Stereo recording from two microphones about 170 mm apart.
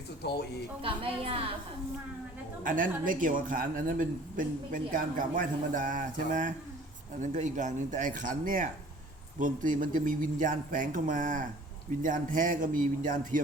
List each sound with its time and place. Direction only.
0.2 s speech: 70° left (ahead or behind)
0.8 s a woman's voice: 35° right (ahead or behind)
2.6 s speech: 50° right (ahead or behind)